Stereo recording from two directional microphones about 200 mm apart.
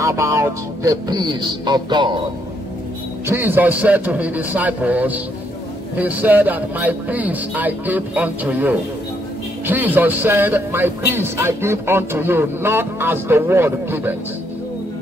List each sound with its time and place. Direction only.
0.0 s music: 15° right (ahead or behind)
3.3 s a man's voice: 10° right (ahead or behind)